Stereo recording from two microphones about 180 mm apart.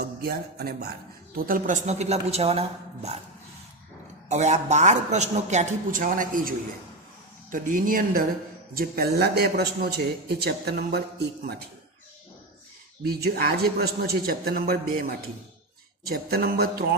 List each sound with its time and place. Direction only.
0.0 s a sound: 60° right (ahead or behind)
1.4 s a man's voice: 50° right (ahead or behind); by 3.2 s 35° right (ahead or behind)
4.3 s a man's voice: 40° right (ahead or behind)
7.5 s a man's voice: 50° right (ahead or behind)
13.1 s a man's voice: 60° right (ahead or behind)